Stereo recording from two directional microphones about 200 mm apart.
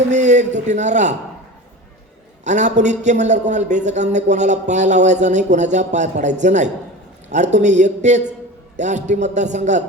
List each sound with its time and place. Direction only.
0.1 s a man's voice: 35° right (ahead or behind)
2.4 s a man's voice: 35° right (ahead or behind)